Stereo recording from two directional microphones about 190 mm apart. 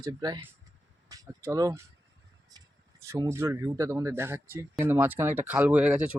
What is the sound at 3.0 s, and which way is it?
Speech, 15° right (ahead or behind).